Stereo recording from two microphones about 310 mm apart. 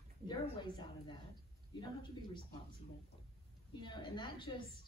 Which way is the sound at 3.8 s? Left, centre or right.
Centre.